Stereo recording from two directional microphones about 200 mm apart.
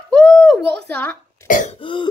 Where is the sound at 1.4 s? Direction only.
40° left (ahead or behind).